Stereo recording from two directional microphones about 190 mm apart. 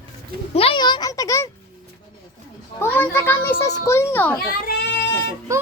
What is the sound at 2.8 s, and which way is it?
A child's voice, 10° left (ahead or behind).